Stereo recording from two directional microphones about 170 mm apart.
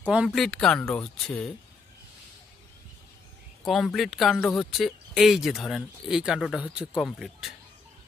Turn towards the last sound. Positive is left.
turn(degrees=0)  # may be behind; listen again after turning